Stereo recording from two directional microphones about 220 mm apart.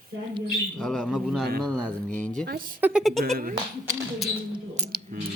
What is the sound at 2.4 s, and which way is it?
Speech, 40° right (ahead or behind).